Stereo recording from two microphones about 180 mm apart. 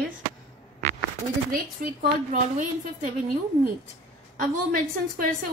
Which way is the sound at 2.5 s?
45° right (ahead or behind).